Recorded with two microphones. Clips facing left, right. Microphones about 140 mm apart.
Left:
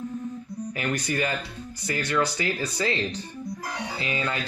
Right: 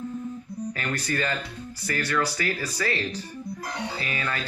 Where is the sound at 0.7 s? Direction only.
15° left (ahead or behind).